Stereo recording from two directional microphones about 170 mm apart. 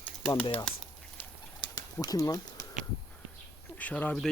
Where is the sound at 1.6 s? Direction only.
25° left (ahead or behind).